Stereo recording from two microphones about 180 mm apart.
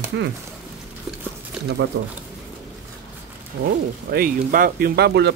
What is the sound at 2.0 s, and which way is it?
Speech, 65° right (ahead or behind).